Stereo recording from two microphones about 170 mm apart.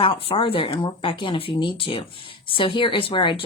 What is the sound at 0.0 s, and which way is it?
Speech, 30° left (ahead or behind).